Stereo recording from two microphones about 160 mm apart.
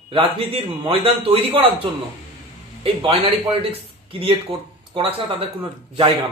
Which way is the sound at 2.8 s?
40° right (ahead or behind).